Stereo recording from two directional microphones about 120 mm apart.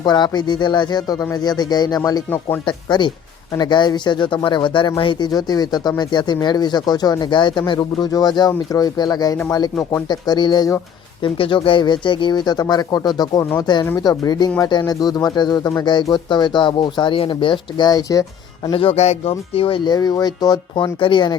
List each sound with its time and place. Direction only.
0.0 s speech: 35° left (ahead or behind)
18.7 s speech: 50° left (ahead or behind)